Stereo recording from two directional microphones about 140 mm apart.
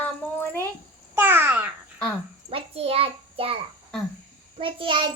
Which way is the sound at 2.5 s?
45° right (ahead or behind).